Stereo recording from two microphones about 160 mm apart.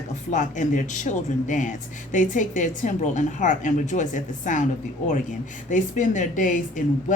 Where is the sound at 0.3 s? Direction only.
50° left (ahead or behind).